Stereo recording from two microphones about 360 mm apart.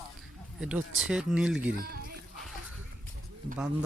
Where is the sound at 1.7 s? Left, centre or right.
Right.